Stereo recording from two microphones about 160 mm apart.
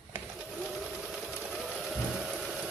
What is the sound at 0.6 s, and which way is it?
Sewing machine, 5° right (ahead or behind).